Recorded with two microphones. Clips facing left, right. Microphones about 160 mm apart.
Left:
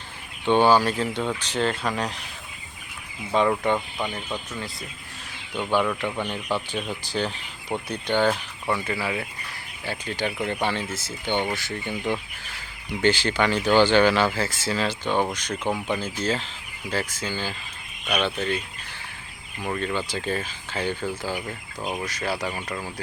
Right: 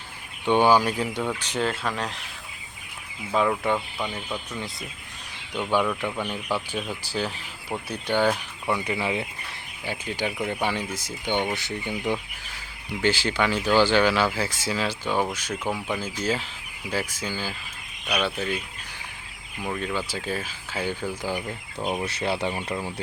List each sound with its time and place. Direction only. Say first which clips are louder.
0.4 s speech: left 1 dB; 15° right (ahead or behind)
3.3 s speech: left 2 dB; centre (ahead or behind)
3.8 s speech: left 1 dB; 15° left (ahead or behind)
4.1 s speech: left 1 dB; 10° right (ahead or behind)
5.8 s speech: left 1 dB; centre (ahead or behind)
19.6 s speech: left 2 dB; 5° right (ahead or behind)
22.0 s speech: right 2 dB; 25° right (ahead or behind)